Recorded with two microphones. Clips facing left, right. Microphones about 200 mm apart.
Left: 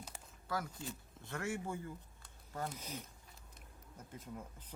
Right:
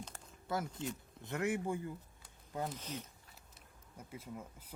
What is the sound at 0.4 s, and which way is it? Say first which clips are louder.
Speech: right 3 dB; 25° right (ahead or behind).